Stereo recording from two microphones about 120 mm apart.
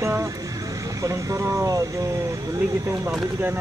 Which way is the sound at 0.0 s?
25° right (ahead or behind).